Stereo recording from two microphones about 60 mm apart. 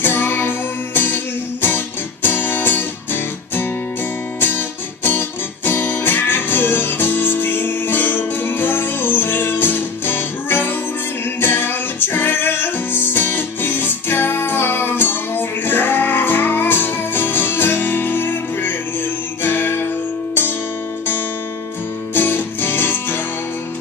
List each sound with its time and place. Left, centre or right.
0.0 s music: left
22.1 s music: left